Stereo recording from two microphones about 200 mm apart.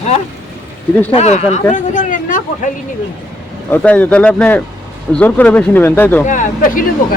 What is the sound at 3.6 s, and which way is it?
Speech, 10° left (ahead or behind).